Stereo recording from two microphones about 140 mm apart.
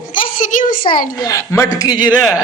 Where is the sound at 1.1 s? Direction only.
25° left (ahead or behind).